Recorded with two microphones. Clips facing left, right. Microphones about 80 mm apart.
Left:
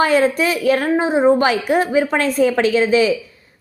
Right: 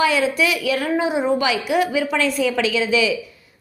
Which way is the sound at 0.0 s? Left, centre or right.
Left.